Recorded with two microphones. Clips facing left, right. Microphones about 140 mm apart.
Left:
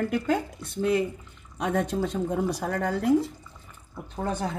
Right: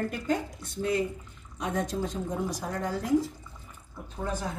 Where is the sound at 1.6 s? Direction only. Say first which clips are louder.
Left 4 dB; 65° left (ahead or behind).